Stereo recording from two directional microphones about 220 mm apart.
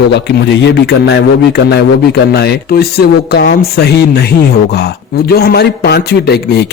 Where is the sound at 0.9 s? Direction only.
50° left (ahead or behind).